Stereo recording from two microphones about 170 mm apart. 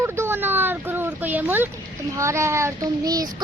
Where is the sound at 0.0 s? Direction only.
15° right (ahead or behind).